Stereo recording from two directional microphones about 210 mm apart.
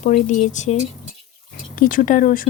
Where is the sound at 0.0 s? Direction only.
35° left (ahead or behind).